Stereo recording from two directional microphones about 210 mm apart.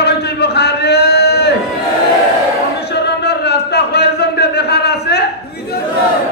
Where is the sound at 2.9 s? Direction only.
50° left (ahead or behind).